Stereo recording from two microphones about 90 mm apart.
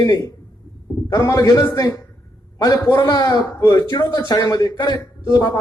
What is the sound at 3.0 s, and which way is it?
A man's voice, 50° left (ahead or behind).